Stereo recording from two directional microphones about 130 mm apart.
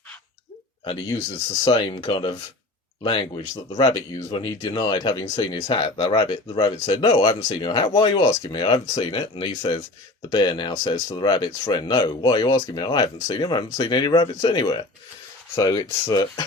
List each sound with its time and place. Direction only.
0.9 s speech: 35° left (ahead or behind)